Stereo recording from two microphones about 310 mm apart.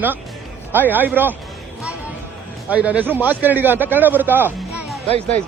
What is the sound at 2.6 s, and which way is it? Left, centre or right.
Speech, centre.